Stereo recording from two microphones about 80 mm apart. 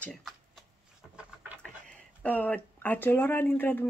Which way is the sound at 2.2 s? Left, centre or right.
Centre.